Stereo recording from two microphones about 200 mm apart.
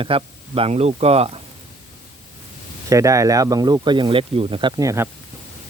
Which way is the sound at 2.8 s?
15° right (ahead or behind).